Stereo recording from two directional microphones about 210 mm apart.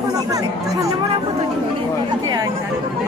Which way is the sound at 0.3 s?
15° right (ahead or behind).